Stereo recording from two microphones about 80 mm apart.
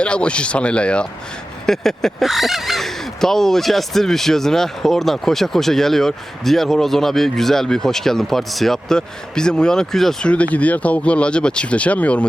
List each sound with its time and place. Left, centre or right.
0.0 s speech: centre
10.3 s speech: centre